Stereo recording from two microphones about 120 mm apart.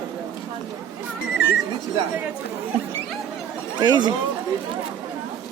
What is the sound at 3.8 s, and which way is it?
Speech, 35° right (ahead or behind).